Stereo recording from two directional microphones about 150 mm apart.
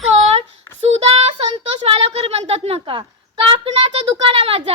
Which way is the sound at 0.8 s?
45° right (ahead or behind).